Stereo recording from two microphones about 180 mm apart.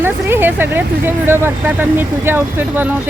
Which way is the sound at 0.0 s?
10° right (ahead or behind).